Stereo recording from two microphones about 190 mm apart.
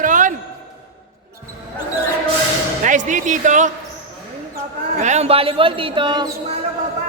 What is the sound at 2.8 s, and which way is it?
Speech, 40° right (ahead or behind).